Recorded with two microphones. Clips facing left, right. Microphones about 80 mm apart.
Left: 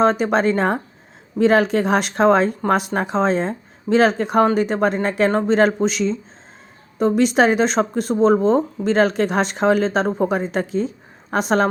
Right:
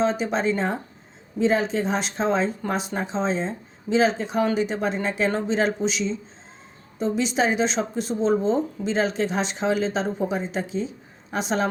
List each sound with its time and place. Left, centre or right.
0.0 s speech: left